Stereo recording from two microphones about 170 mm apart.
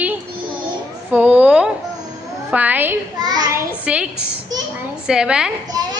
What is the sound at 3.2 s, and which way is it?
Speech, 25° right (ahead or behind).